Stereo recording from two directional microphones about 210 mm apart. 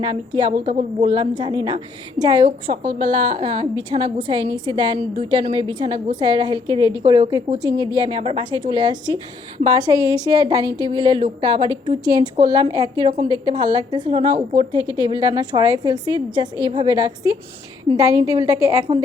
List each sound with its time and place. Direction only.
0.0 s a woman's voice: 20° right (ahead or behind)